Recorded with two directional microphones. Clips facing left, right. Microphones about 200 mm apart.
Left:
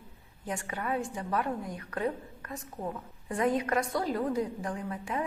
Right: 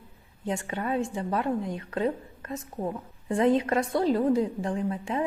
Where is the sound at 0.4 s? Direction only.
25° right (ahead or behind).